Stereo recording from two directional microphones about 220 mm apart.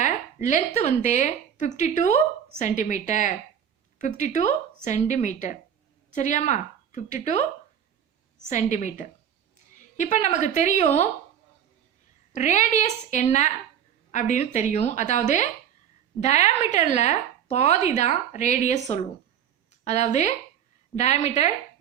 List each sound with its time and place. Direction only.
0.0 s a woman's voice: 35° left (ahead or behind)
8.4 s a woman's voice: 35° left (ahead or behind)
12.3 s a woman's voice: 30° left (ahead or behind)
16.2 s a woman's voice: 30° left (ahead or behind)